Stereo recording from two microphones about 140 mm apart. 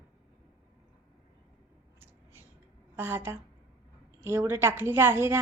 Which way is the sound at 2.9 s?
15° right (ahead or behind).